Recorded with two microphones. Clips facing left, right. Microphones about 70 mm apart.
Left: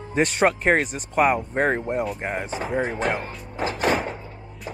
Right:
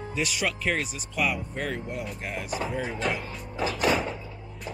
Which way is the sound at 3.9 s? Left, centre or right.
Left.